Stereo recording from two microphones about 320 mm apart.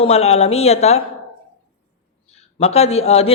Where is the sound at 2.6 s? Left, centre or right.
Centre.